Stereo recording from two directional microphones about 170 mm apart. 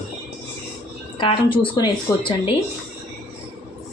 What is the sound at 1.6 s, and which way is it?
Speech, 25° left (ahead or behind).